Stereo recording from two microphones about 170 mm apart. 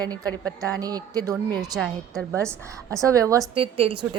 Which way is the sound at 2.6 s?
20° right (ahead or behind).